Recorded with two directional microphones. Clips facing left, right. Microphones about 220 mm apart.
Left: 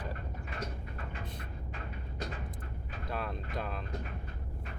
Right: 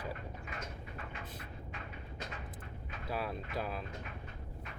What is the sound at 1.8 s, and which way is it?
Vehicle, 35° left (ahead or behind).